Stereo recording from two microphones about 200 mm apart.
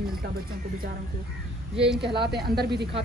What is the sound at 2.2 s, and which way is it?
Speech, 50° right (ahead or behind).